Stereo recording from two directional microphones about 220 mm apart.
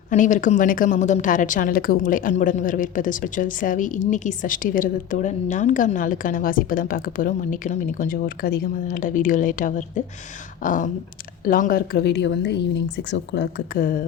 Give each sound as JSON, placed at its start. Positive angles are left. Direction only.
{"t": 0.1, "sound": "a woman's voice", "side_deg": 35}